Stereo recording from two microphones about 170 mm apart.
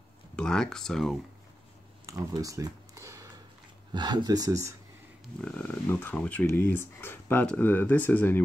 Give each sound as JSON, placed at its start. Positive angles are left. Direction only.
{"t": 0.4, "sound": "speech", "side_deg": 5}
{"t": 2.0, "sound": "speech", "side_deg": -20}
{"t": 5.4, "sound": "speech", "side_deg": 10}